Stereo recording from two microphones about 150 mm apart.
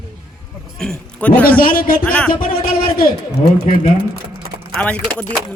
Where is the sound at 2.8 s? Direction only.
75° left (ahead or behind).